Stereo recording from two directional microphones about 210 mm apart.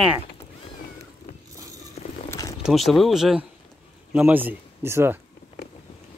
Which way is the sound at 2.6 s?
Centre (ahead or behind).